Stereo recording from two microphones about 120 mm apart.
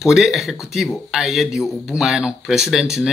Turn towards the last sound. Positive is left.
turn(degrees=-5)  # may be behind; listen again after turning